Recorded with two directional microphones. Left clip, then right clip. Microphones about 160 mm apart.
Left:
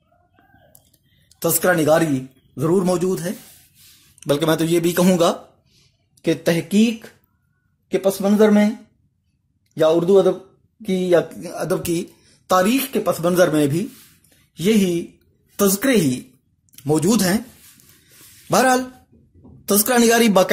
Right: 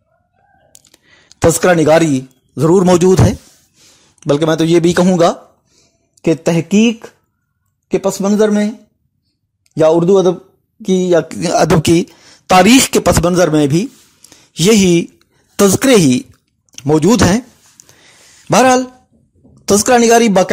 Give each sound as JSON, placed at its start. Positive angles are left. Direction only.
{"t": 1.3, "sound": "speech", "side_deg": -50}
{"t": 3.7, "sound": "a sound", "side_deg": -35}
{"t": 5.0, "sound": "speech", "side_deg": -35}
{"t": 7.9, "sound": "speech", "side_deg": -45}
{"t": 9.8, "sound": "speech", "side_deg": -40}
{"t": 14.5, "sound": "a woman's voice", "side_deg": -65}
{"t": 16.7, "sound": "speech", "side_deg": -50}
{"t": 17.8, "sound": "a sound", "side_deg": -25}
{"t": 18.5, "sound": "speech", "side_deg": -50}